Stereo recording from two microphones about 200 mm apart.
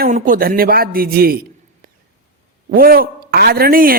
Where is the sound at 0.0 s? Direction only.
45° right (ahead or behind).